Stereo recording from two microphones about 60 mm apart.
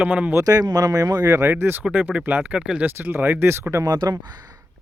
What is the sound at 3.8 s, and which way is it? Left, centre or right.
Speech, right.